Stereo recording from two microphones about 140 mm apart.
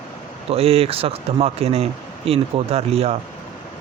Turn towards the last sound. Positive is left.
turn(degrees=-45)  # may be behind; listen again after turning